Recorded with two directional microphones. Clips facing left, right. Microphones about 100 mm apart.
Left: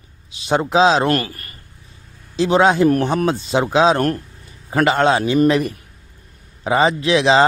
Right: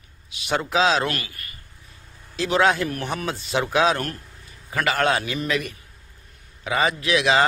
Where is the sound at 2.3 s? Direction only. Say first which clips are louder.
Left 6 dB; 25° left (ahead or behind).